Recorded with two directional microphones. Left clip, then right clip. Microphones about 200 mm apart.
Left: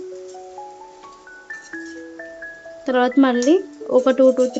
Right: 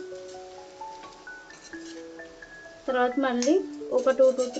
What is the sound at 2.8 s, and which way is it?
Speech, 50° left (ahead or behind).